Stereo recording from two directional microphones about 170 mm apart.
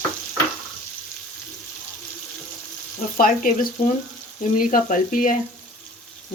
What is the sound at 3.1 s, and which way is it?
Speech, 55° left (ahead or behind).